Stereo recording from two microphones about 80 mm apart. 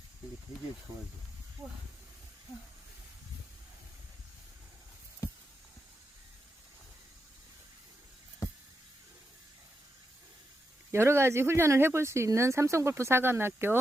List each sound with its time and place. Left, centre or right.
10.9 s speech: right